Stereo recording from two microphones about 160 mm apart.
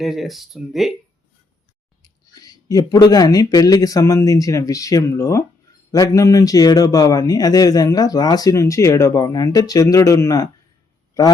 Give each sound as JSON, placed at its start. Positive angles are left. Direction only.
{"t": 0.0, "sound": "speech", "side_deg": 0}
{"t": 2.0, "sound": "a man's voice", "side_deg": 25}